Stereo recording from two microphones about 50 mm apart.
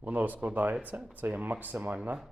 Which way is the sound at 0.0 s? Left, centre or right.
Right.